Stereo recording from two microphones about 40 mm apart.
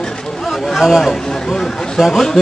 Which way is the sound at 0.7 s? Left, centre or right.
Centre.